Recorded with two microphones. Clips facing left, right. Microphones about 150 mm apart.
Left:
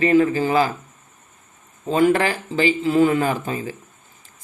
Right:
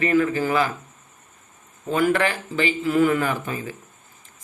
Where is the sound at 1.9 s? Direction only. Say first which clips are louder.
Left 3 dB; 30° left (ahead or behind).